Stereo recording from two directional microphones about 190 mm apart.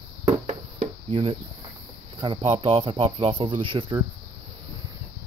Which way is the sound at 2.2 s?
25° right (ahead or behind).